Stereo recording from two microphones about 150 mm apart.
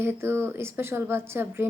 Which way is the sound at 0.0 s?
15° right (ahead or behind).